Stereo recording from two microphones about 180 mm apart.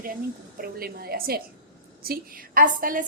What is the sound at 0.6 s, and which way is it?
A woman's voice, 60° right (ahead or behind).